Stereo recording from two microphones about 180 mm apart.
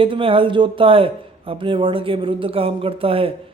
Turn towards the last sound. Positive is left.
turn(degrees=-30)  # may be behind; listen again after turning